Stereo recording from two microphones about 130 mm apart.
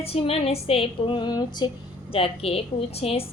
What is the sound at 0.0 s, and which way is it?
Speech, 50° left (ahead or behind).